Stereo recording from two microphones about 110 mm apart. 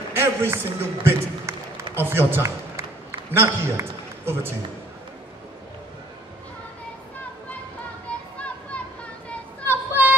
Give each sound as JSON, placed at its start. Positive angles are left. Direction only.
{"t": 0.1, "sound": "a man's voice", "side_deg": -20}
{"t": 9.7, "sound": "music", "side_deg": -20}